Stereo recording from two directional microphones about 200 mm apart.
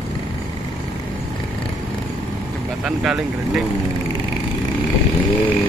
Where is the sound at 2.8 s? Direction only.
5° right (ahead or behind).